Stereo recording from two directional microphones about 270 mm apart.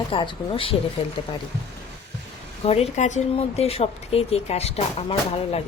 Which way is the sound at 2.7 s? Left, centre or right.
Left.